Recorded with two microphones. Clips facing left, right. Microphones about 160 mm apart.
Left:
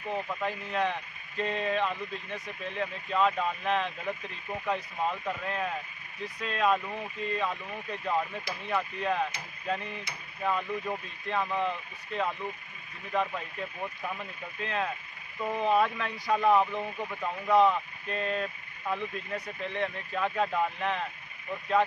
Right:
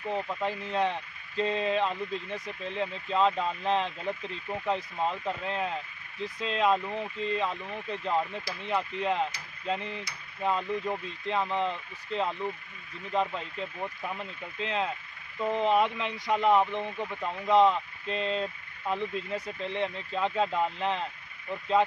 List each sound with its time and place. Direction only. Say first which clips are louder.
0.4 s speech: right 2 dB; 30° right (ahead or behind)